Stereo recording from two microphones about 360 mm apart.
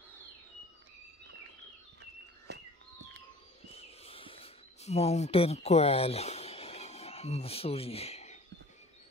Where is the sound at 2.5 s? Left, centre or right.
Right.